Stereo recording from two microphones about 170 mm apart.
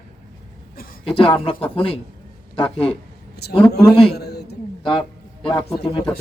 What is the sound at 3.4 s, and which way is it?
Speech, 70° left (ahead or behind).